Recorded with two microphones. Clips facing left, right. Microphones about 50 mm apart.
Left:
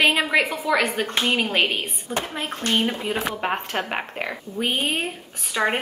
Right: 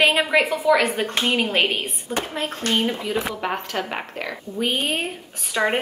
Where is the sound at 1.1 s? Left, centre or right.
Centre.